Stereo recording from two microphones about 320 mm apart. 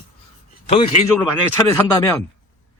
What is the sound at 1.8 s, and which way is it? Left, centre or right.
Speech, centre.